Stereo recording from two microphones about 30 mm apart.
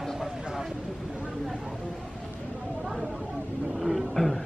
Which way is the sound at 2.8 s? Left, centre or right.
Centre.